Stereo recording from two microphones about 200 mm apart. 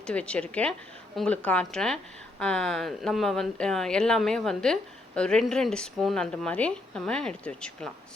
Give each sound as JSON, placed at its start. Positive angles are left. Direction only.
{"t": 0.0, "sound": "speech", "side_deg": 5}